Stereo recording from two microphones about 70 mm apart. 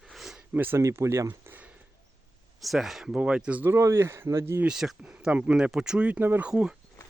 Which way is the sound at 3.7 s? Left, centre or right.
Right.